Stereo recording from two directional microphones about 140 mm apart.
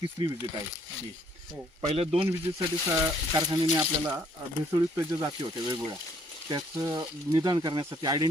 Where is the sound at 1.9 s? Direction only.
45° right (ahead or behind).